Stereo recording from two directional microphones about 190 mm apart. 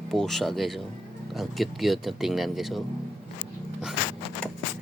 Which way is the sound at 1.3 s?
Centre (ahead or behind).